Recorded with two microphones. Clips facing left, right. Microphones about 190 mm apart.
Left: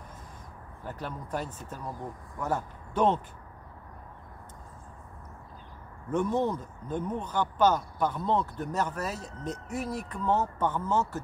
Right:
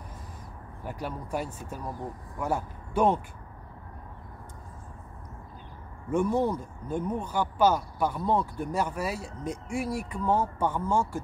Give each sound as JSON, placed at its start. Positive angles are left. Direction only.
{"t": 0.8, "sound": "speech", "side_deg": -10}
{"t": 6.0, "sound": "speech", "side_deg": -10}